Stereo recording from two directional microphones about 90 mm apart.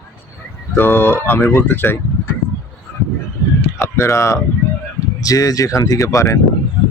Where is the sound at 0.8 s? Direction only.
25° left (ahead or behind).